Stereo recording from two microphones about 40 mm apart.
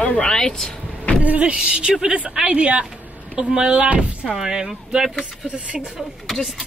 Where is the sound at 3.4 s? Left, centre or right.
Right.